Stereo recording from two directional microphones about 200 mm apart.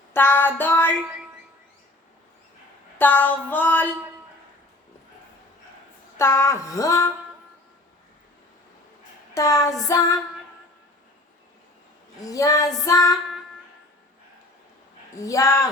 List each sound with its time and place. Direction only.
0.1 s music: 10° left (ahead or behind)
3.0 s music: 10° left (ahead or behind)
6.1 s music: 15° left (ahead or behind)
9.3 s a sound: 15° left (ahead or behind)
9.8 s music: 15° left (ahead or behind)
12.2 s music: 15° left (ahead or behind)
15.2 s music: 15° left (ahead or behind)